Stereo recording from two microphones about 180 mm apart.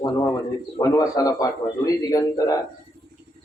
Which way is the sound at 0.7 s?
20° left (ahead or behind).